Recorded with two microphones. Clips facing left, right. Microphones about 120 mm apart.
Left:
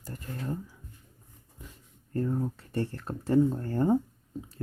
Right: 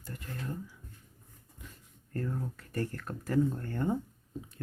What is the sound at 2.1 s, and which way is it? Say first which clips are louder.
Speech: left 6 dB; 25° left (ahead or behind).